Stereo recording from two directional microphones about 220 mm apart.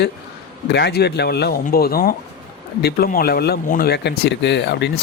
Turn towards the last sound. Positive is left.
turn(degrees=50)  # may be behind; listen again after turning